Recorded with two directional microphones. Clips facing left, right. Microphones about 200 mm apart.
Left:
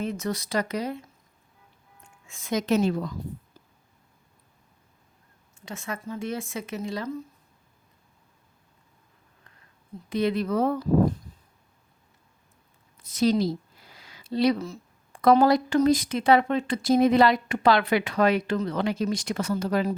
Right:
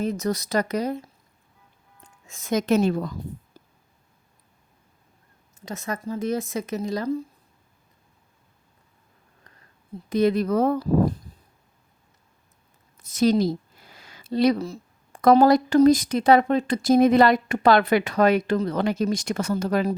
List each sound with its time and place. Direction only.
0.0 s speech: 40° right (ahead or behind)
2.0 s speech: 40° right (ahead or behind)
5.5 s speech: 40° right (ahead or behind)
10.1 s a woman's voice: 40° right (ahead or behind)
13.0 s a woman's voice: 45° right (ahead or behind)
14.0 s a sound: 50° right (ahead or behind)
14.6 s a woman's voice: 40° right (ahead or behind)